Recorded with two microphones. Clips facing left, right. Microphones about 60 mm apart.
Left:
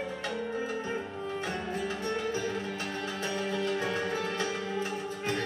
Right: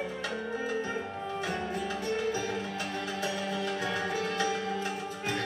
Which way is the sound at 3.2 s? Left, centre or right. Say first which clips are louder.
Left 2 dB; left.